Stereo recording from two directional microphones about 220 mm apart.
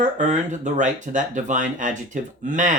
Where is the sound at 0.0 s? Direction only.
35° right (ahead or behind).